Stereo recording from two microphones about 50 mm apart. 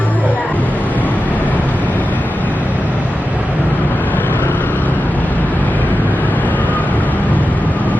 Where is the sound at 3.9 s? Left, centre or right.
Left.